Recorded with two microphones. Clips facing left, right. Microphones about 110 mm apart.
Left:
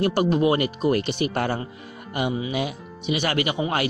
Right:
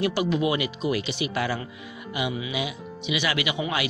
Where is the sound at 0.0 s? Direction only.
45° left (ahead or behind).